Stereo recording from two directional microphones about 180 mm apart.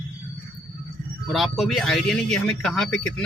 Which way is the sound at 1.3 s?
Centre (ahead or behind).